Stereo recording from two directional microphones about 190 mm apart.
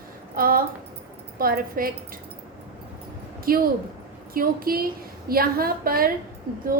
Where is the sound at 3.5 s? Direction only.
50° right (ahead or behind).